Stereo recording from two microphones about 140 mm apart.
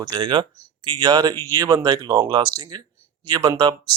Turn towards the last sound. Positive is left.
turn(degrees=-30)  # may be behind; listen again after turning